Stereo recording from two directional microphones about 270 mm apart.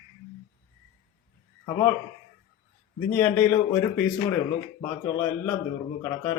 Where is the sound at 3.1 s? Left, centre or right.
Centre.